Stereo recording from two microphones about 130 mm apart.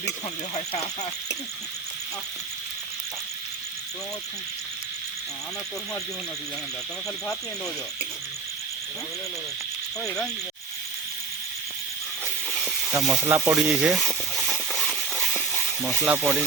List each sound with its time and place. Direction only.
0.5 s speech: 55° left (ahead or behind)
12.5 s snake: centre (ahead or behind)
13.2 s speech: 15° right (ahead or behind)
13.6 s a sound: 5° right (ahead or behind)
15.6 s snake: centre (ahead or behind)
16.0 s speech: 20° right (ahead or behind)